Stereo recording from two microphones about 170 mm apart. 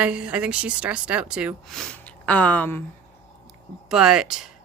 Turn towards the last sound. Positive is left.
turn(degrees=-5)  # may be behind; listen again after turning